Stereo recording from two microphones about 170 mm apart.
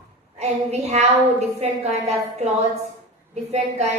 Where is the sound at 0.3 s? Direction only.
40° right (ahead or behind).